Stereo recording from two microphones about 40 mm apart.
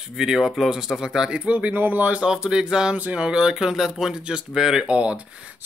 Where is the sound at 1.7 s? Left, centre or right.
Right.